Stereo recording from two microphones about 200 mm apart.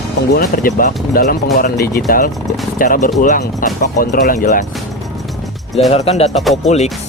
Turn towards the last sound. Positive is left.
turn(degrees=0)  # may be behind; listen again after turning